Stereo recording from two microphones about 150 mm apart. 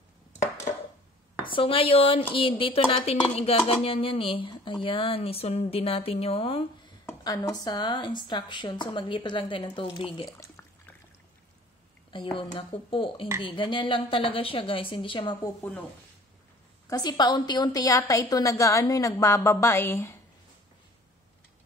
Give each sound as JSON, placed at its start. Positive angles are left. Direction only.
{"t": 1.4, "sound": "speech", "side_deg": 35}
{"t": 7.1, "sound": "speech", "side_deg": 25}
{"t": 10.3, "sound": "a sound", "side_deg": 20}
{"t": 12.1, "sound": "a woman's voice", "side_deg": 35}
{"t": 16.9, "sound": "a woman's voice", "side_deg": 30}